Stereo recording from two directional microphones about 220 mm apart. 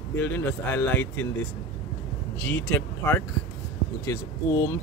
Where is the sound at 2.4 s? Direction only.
10° left (ahead or behind).